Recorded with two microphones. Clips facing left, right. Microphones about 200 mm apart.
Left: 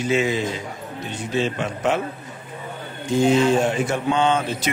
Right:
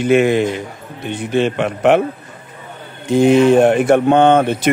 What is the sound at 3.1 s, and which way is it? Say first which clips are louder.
A man's voice: right 7 dB; 60° right (ahead or behind).